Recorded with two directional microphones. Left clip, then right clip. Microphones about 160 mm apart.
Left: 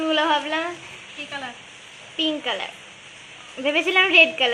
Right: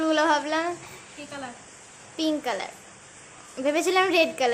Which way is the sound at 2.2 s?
15° right (ahead or behind).